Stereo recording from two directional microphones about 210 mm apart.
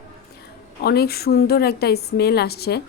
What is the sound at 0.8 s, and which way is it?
A woman's voice, 50° left (ahead or behind).